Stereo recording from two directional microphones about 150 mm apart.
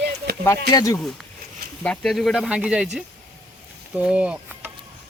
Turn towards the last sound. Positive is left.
turn(degrees=-5)  # may be behind; listen again after turning